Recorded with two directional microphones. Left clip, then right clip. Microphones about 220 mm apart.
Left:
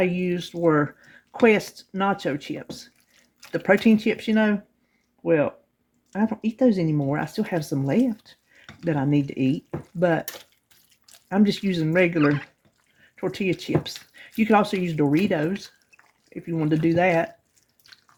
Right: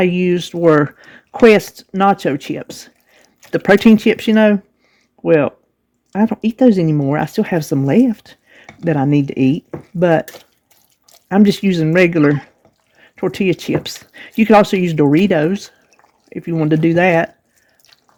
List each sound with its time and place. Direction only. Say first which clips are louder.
0.0 s speech: right 9 dB; 45° right (ahead or behind)
11.3 s speech: right 9 dB; 45° right (ahead or behind)